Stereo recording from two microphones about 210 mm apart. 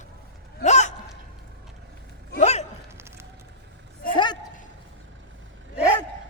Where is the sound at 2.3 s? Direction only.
30° left (ahead or behind).